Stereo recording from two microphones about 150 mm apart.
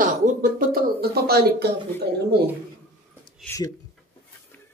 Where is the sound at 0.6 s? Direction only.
85° right.